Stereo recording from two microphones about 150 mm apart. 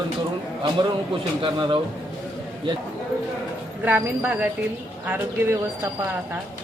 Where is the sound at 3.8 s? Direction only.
15° right (ahead or behind).